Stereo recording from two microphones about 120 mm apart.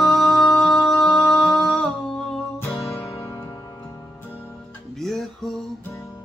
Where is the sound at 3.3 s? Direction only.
25° left (ahead or behind).